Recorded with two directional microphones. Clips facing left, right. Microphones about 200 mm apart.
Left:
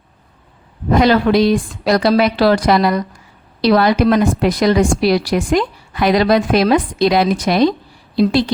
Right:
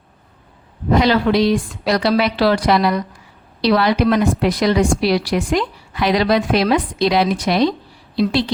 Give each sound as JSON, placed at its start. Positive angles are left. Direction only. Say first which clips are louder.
{"t": 0.9, "sound": "a woman's voice", "louder": "left 3 dB", "side_deg": 50}